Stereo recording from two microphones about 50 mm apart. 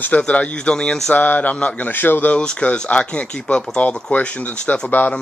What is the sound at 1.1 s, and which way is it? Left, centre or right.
A man's voice, left.